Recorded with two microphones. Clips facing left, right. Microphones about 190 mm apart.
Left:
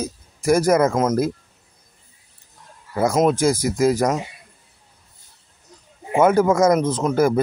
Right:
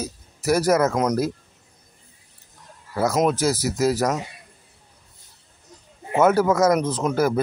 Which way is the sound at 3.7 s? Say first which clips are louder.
Left 3 dB; 5° right (ahead or behind).